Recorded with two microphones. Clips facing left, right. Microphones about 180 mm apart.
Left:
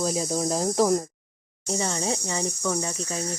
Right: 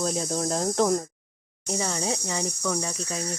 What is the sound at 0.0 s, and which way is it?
Speech, 5° left (ahead or behind).